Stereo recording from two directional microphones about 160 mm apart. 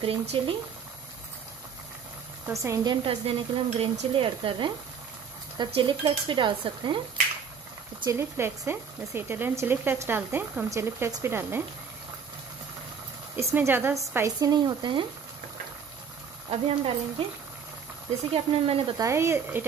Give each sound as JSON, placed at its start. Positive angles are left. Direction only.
{"t": 0.0, "sound": "speech", "side_deg": -35}
{"t": 2.5, "sound": "speech", "side_deg": -20}
{"t": 5.8, "sound": "speech", "side_deg": -30}
{"t": 8.0, "sound": "speech", "side_deg": -20}
{"t": 13.4, "sound": "speech", "side_deg": -15}
{"t": 16.4, "sound": "speech", "side_deg": -35}
{"t": 18.3, "sound": "speech", "side_deg": -35}
{"t": 18.9, "sound": "speech", "side_deg": -15}